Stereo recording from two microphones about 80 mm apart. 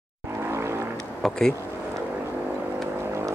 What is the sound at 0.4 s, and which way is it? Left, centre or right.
Vehicle, right.